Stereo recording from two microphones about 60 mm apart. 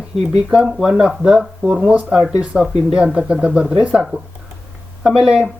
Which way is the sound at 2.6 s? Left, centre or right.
Centre.